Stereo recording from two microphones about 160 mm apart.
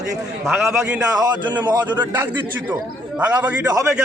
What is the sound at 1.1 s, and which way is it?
Speech, 25° right (ahead or behind).